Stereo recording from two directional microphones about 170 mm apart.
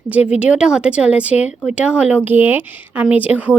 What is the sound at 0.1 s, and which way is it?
A woman's voice, 10° right (ahead or behind).